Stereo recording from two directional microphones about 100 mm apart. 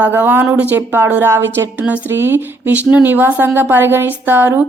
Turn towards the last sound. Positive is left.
turn(degrees=-20)  # may be behind; listen again after turning